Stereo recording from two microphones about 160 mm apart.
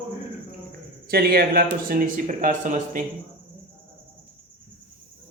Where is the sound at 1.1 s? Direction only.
75° right (ahead or behind); by 3.0 s 55° right (ahead or behind).